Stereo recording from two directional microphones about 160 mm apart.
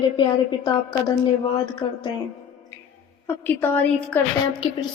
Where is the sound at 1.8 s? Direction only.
30° left (ahead or behind).